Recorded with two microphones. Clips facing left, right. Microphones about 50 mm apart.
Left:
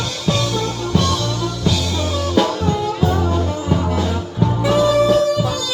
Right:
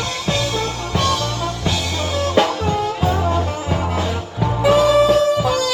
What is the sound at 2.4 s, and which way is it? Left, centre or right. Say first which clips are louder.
Music: even; right.